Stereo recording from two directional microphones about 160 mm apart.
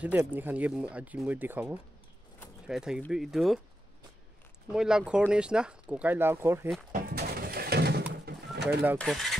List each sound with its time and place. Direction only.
0.0 s speech: 10° right (ahead or behind)
4.7 s speech: 5° right (ahead or behind)
6.9 s pigeon: 65° right (ahead or behind); by 8.6 s 90° right
8.9 s speech: centre (ahead or behind)